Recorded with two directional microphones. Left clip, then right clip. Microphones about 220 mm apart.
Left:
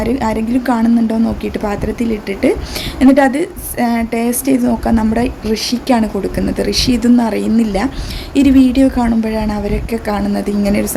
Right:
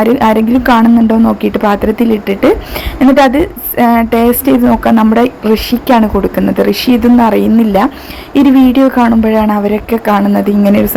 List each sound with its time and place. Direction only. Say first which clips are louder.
0.0 s a woman's voice: right 8 dB; 15° right (ahead or behind)